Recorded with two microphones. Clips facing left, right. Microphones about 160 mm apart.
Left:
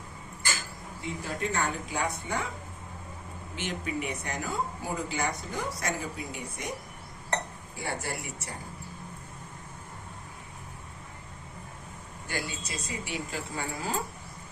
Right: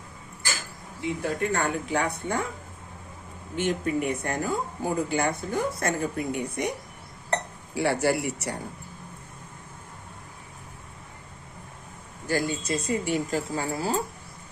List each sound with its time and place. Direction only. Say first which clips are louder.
1.2 s speech: right 4 dB; 55° right (ahead or behind)
3.5 s speech: right 8 dB; 50° right (ahead or behind)
7.8 s speech: right 11 dB; 75° right (ahead or behind)
12.3 s speech: right 10 dB; 45° right (ahead or behind)